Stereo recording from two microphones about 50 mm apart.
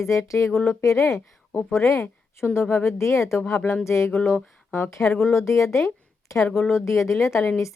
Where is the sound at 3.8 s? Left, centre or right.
Left.